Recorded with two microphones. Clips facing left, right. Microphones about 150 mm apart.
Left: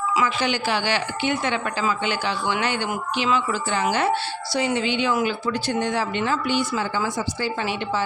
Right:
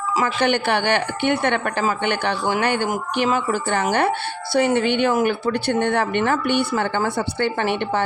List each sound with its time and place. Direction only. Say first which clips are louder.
0.3 s speech: right 4 dB; 60° right (ahead or behind)